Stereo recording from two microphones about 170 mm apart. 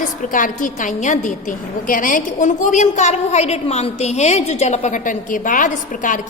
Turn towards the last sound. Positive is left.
turn(degrees=50)  # may be behind; listen again after turning